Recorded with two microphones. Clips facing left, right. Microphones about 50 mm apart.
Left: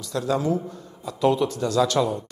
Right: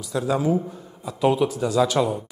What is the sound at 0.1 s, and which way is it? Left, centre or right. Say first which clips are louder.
A man's voice: right 2 dB; centre.